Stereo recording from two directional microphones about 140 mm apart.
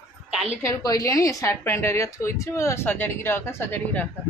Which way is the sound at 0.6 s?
25° left (ahead or behind).